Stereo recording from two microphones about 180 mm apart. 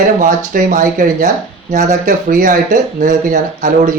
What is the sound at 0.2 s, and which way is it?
Speech, 50° right (ahead or behind).